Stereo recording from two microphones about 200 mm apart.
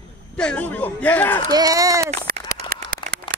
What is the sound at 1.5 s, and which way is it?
Speech, 15° right (ahead or behind).